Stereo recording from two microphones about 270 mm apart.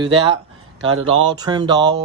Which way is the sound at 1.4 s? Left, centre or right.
Centre.